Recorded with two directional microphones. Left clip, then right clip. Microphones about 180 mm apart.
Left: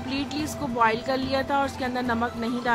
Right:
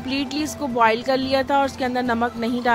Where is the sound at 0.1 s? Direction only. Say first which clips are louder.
Right 5 dB; 45° right (ahead or behind).